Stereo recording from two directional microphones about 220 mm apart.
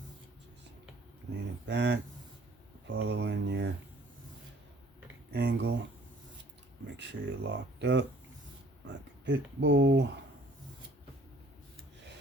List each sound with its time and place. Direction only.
1.3 s speech: 50° right (ahead or behind)
5.3 s speech: 50° right (ahead or behind)
6.9 s speech: 55° right (ahead or behind)